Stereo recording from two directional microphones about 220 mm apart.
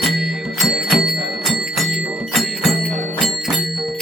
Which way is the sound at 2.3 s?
Centre (ahead or behind).